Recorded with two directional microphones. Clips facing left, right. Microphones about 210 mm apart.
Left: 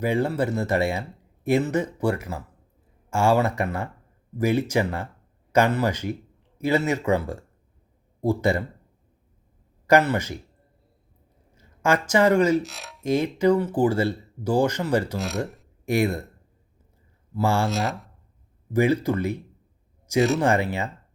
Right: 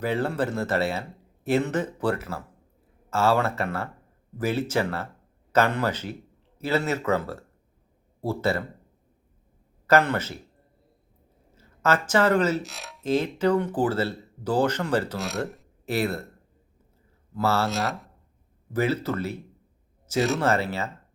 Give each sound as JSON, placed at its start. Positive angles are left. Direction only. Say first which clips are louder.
{"t": 0.0, "sound": "speech", "louder": "left 2 dB", "side_deg": 10}
{"t": 9.8, "sound": "speech", "louder": "left 2 dB", "side_deg": 10}
{"t": 11.5, "sound": "speech", "louder": "left 2 dB", "side_deg": 15}
{"t": 12.6, "sound": "speech", "louder": "left 1 dB", "side_deg": 0}
{"t": 13.0, "sound": "speech", "louder": "left 2 dB", "side_deg": 10}
{"t": 15.2, "sound": "speech", "louder": "left 1 dB", "side_deg": 0}
{"t": 15.9, "sound": "speech", "louder": "left 4 dB", "side_deg": 15}
{"t": 17.3, "sound": "speech", "louder": "left 1 dB", "side_deg": 15}
{"t": 17.7, "sound": "speech", "louder": "left 2 dB", "side_deg": 0}
{"t": 18.7, "sound": "speech", "louder": "left 4 dB", "side_deg": 15}
{"t": 20.1, "sound": "speech", "louder": "left 3 dB", "side_deg": 0}
{"t": 20.4, "sound": "speech", "louder": "left 2 dB", "side_deg": 15}